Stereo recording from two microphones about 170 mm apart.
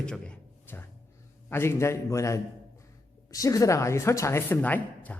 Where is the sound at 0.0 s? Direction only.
5° left (ahead or behind).